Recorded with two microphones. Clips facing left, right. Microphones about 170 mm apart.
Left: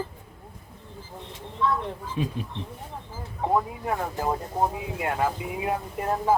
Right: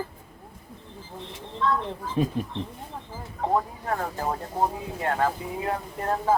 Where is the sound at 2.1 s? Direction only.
45° right (ahead or behind).